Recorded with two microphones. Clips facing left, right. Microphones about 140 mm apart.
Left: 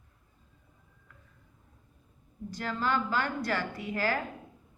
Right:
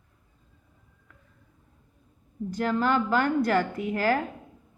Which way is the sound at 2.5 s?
50° right (ahead or behind).